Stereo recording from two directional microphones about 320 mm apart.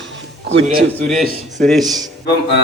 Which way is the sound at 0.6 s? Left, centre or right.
Right.